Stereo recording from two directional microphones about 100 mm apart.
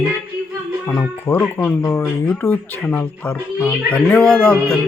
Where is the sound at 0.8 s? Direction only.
20° left (ahead or behind).